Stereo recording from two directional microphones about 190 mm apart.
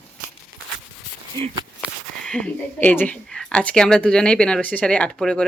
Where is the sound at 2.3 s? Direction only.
5° left (ahead or behind).